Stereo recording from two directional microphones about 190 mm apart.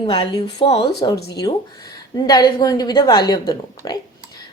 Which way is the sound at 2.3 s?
20° left (ahead or behind).